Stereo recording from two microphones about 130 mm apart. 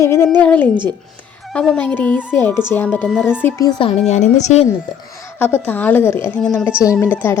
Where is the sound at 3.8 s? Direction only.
50° left (ahead or behind).